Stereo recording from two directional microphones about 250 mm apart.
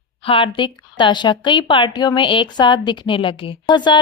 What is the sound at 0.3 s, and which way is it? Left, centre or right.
Speech, left.